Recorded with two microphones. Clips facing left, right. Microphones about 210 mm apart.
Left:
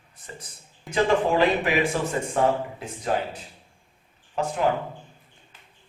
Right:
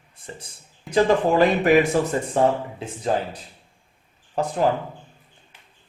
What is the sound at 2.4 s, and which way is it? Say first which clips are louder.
Speech: right 3 dB; 30° right (ahead or behind).